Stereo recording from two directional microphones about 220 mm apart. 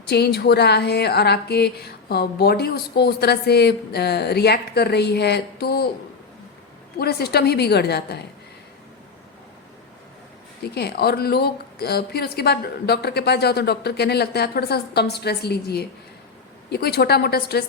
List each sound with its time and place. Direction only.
0.1 s speech: 45° left (ahead or behind)
7.0 s speech: 45° left (ahead or behind)
10.6 s speech: 45° left (ahead or behind)